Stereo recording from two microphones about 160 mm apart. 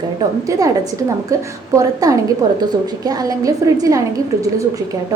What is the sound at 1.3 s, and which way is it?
A woman's voice, 20° right (ahead or behind).